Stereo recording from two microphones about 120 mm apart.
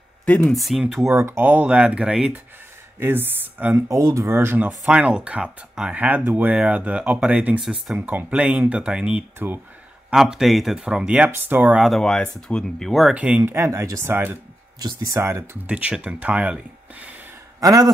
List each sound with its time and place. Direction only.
0.2 s speech: 10° left (ahead or behind)
1.0 s speech: 25° right (ahead or behind)
11.8 s speech: 5° left (ahead or behind)
13.1 s speech: 10° right (ahead or behind)
13.4 s speech: 25° right (ahead or behind)
15.7 s speech: 10° right (ahead or behind)
17.6 s a man's voice: 30° right (ahead or behind)